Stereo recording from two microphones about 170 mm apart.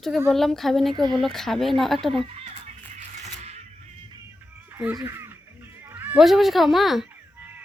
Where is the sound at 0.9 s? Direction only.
25° right (ahead or behind).